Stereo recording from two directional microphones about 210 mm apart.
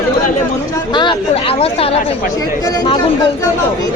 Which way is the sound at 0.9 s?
25° left (ahead or behind).